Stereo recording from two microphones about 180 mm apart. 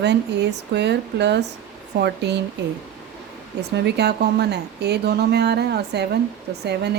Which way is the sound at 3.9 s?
65° right (ahead or behind).